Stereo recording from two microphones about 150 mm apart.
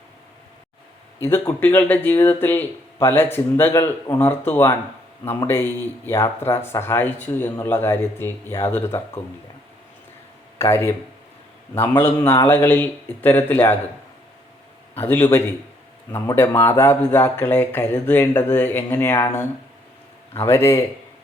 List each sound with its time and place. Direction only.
1.2 s speech: 15° left (ahead or behind)
10.6 s speech: 15° left (ahead or behind)
15.0 s speech: 15° left (ahead or behind)